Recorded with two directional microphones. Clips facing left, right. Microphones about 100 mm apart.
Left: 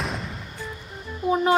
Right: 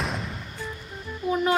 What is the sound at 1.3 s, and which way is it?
Music, 30° left (ahead or behind).